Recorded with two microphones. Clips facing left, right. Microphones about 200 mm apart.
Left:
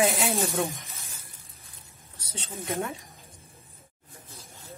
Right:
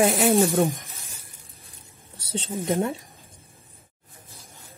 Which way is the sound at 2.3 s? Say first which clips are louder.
Right 8 dB; 30° right (ahead or behind).